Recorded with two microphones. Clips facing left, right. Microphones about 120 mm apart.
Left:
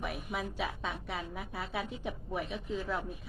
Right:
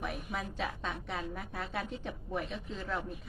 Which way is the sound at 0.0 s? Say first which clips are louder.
Left 1 dB; 5° left (ahead or behind).